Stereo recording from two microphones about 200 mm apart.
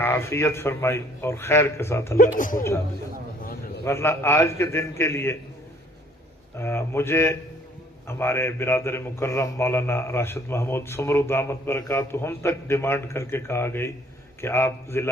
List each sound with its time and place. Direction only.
0.0 s a man's voice: 15° left (ahead or behind)
2.1 s speech: 40° left (ahead or behind)
3.8 s a man's voice: 15° left (ahead or behind)
6.6 s a man's voice: 10° left (ahead or behind)